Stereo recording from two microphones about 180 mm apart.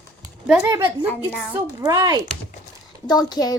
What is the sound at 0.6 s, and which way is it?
Speech, 25° right (ahead or behind).